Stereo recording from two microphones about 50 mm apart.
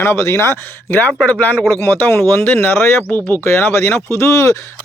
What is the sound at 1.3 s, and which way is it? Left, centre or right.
Speech, left.